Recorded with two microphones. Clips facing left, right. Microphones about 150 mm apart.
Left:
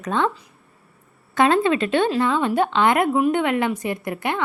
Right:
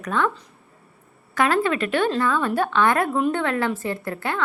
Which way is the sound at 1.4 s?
25° left (ahead or behind).